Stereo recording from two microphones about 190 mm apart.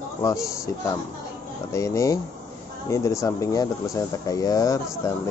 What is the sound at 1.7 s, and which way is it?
Speech, 15° left (ahead or behind).